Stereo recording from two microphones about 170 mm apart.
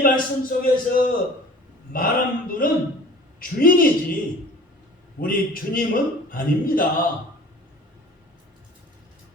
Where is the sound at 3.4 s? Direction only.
55° left (ahead or behind).